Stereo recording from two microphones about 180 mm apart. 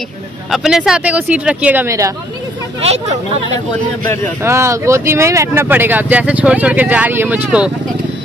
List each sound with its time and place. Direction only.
0.5 s speech: 5° right (ahead or behind)
2.8 s speech: 35° right (ahead or behind)
4.4 s speech: 15° right (ahead or behind)